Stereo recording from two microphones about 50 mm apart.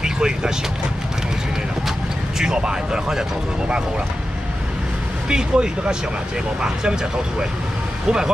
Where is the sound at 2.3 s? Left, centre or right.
Centre.